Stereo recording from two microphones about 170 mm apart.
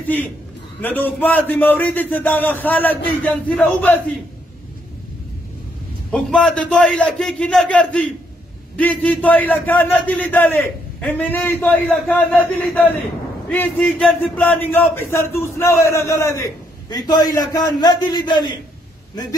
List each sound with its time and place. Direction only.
0.0 s a man's voice: 10° left (ahead or behind)
6.1 s a man's voice: 5° left (ahead or behind); by 18.6 s 25° left (ahead or behind)